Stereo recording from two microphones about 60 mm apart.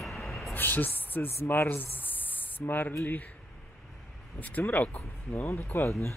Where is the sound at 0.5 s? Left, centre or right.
Left.